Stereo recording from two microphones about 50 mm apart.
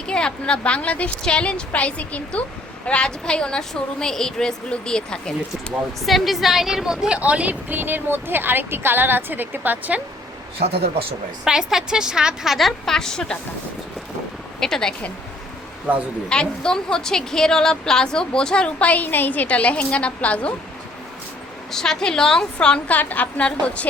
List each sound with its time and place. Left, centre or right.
0.1 s a woman's voice: centre
6.0 s a woman's voice: centre
7.2 s speech: right
7.7 s speech: right
11.4 s a woman's voice: centre
14.6 s speech: centre
16.3 s a woman's voice: centre
21.7 s a woman's voice: centre
22.9 s a woman's voice: left